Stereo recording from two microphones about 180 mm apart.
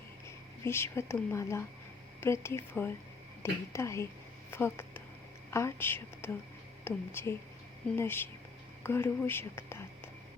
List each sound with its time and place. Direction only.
0.6 s a woman's voice: 15° left (ahead or behind)